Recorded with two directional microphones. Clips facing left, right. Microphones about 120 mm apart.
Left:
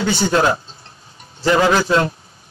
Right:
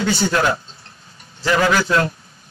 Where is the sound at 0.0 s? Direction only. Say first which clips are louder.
Left 2 dB; 25° left (ahead or behind).